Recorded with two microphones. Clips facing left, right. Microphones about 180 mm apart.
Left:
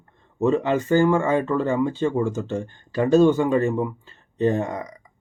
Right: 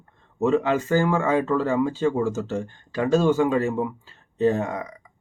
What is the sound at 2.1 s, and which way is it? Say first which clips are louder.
Speech: left 1 dB; 5° right (ahead or behind).